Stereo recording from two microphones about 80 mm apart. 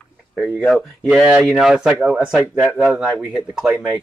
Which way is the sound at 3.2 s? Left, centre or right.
Centre.